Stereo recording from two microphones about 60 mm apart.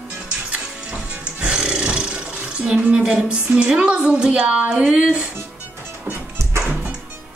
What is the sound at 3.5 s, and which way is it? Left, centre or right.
A woman's voice, centre.